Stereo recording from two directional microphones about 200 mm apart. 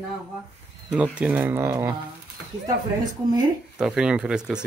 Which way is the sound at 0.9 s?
5° right (ahead or behind).